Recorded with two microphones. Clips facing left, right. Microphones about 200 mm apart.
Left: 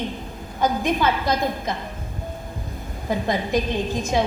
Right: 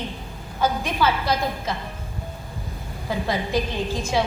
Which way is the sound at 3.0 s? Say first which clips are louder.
Left 2 dB; 20° left (ahead or behind).